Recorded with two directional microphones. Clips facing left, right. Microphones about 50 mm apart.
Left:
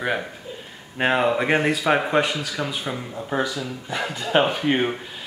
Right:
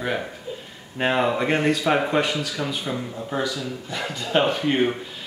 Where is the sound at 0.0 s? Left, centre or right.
Centre.